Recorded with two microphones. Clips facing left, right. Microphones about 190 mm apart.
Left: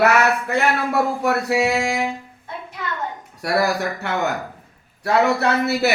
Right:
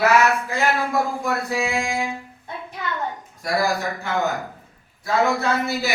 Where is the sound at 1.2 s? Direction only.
70° left (ahead or behind).